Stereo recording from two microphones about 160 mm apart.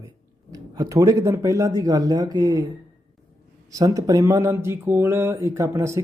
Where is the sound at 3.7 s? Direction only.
20° right (ahead or behind).